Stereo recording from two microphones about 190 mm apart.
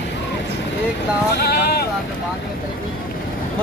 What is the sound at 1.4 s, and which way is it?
Speech, 60° left (ahead or behind).